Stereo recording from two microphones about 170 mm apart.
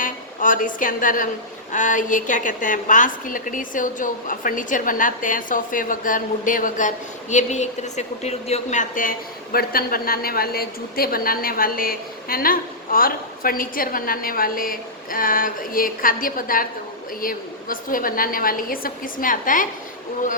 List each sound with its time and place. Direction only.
0.0 s a woman's voice: 50° left (ahead or behind)